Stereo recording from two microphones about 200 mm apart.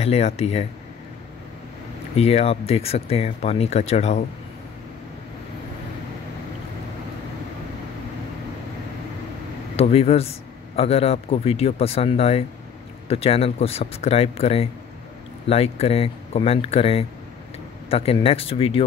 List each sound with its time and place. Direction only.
0.0 s speech: 30° left (ahead or behind)
2.1 s speech: 30° left (ahead or behind)
9.8 s speech: 30° left (ahead or behind)